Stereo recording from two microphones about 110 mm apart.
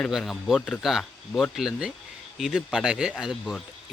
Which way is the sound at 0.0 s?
Centre (ahead or behind).